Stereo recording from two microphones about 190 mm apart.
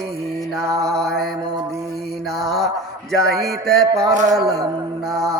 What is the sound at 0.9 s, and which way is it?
Mantra, centre (ahead or behind).